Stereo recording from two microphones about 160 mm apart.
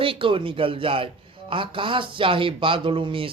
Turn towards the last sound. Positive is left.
turn(degrees=-35)  # may be behind; listen again after turning